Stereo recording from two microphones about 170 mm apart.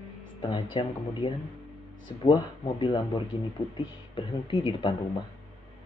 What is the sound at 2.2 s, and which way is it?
Speech, 30° left (ahead or behind).